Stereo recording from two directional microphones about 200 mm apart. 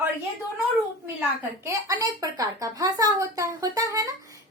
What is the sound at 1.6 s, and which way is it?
Speech, 15° right (ahead or behind).